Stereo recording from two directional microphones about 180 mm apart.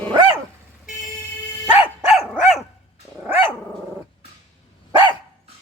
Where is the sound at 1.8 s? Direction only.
Centre (ahead or behind).